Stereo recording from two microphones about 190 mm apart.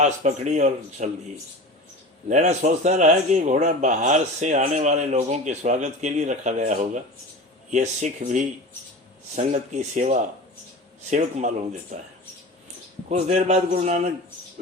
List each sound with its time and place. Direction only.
0.0 s speech: 35° right (ahead or behind)
2.3 s speech: 35° right (ahead or behind)
13.1 s speech: 35° right (ahead or behind)